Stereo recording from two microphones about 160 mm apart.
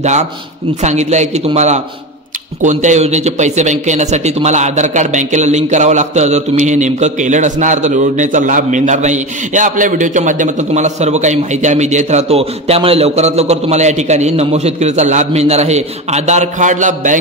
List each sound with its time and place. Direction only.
0.0 s speech: 45° right (ahead or behind)